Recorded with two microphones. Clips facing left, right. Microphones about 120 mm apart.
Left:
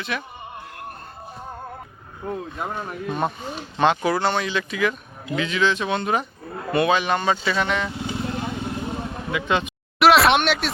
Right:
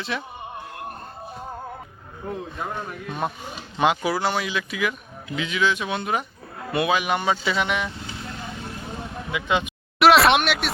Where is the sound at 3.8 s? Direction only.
10° right (ahead or behind).